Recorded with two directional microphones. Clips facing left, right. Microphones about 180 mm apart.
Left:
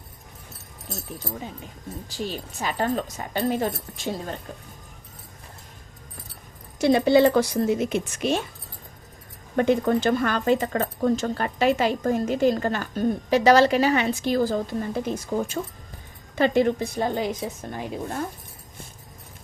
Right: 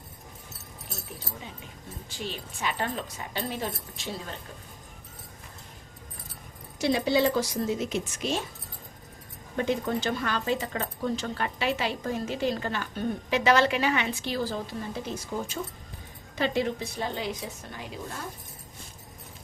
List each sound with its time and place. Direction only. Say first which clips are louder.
2.0 s speech: left 5 dB; 40° left (ahead or behind)
6.7 s a woman's voice: left 7 dB; 50° left (ahead or behind)
9.6 s speech: left 7 dB; 55° left (ahead or behind)